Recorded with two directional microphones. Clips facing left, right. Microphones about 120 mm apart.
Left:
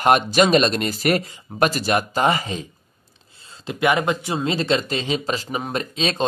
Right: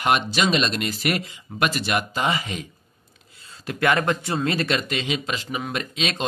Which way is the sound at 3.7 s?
15° left (ahead or behind).